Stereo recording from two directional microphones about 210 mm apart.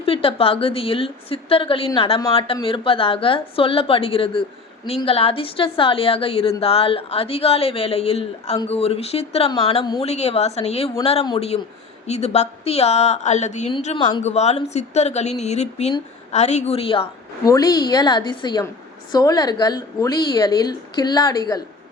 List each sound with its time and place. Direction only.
0.0 s a woman's voice: 25° left (ahead or behind)